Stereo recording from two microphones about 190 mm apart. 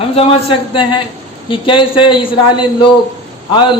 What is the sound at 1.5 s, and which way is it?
Speech, 25° left (ahead or behind).